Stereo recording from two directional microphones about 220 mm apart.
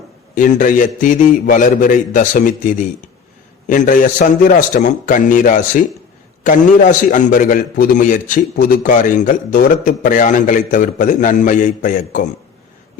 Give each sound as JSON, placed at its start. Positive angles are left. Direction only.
{"t": 0.3, "sound": "a man's voice", "side_deg": 35}